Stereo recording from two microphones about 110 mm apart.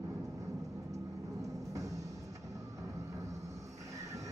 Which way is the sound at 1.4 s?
30° right (ahead or behind).